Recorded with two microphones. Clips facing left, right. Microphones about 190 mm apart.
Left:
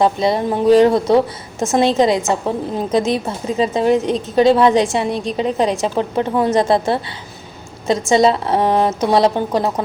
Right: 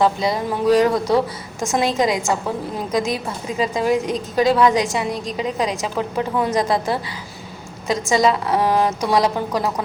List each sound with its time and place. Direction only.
0.0 s a woman's voice: 25° left (ahead or behind)